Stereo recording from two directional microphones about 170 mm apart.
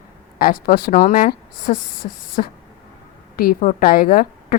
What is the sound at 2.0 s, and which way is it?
Speech, 45° left (ahead or behind).